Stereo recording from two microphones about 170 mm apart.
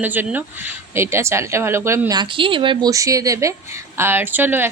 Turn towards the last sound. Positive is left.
turn(degrees=-10)  # may be behind; listen again after turning